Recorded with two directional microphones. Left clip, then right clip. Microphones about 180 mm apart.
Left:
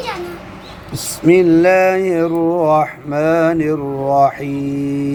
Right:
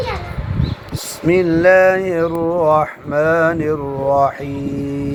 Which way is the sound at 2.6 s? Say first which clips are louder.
Even; 45° left (ahead or behind).